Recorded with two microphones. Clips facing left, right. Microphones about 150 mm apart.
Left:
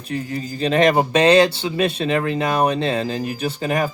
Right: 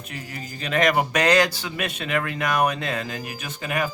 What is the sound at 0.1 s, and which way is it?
Speech, 30° left (ahead or behind).